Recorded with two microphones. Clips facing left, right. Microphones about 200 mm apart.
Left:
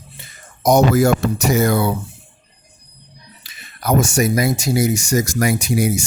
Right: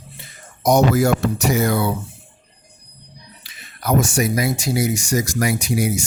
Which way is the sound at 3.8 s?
45° left (ahead or behind).